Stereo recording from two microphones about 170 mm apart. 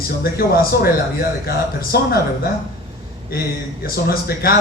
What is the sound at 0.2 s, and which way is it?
Speech, 65° left (ahead or behind).